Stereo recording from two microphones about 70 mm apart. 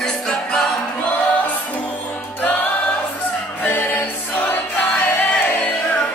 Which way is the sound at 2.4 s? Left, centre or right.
Left.